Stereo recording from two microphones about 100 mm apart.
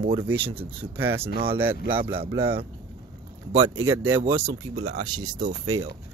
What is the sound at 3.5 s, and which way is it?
Speech, 30° right (ahead or behind).